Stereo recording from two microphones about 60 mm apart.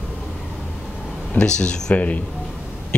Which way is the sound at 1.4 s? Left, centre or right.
Centre.